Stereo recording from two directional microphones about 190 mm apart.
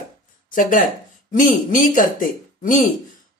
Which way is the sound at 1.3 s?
45° left (ahead or behind).